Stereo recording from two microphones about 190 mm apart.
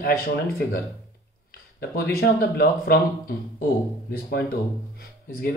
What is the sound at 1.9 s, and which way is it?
Speech, 55° left (ahead or behind).